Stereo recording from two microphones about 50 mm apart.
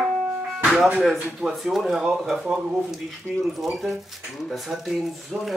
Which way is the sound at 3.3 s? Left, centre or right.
Right.